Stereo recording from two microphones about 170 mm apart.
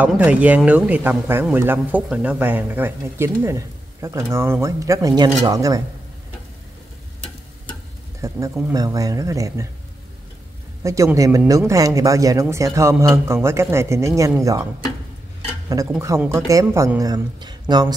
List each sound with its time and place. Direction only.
0.0 s speech: 10° right (ahead or behind)
8.2 s speech: 15° right (ahead or behind)
10.8 s speech: 20° right (ahead or behind)
15.7 s speech: 20° right (ahead or behind)